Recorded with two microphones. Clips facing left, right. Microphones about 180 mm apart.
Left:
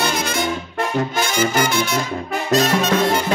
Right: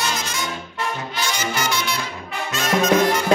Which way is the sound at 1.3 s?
50° left (ahead or behind).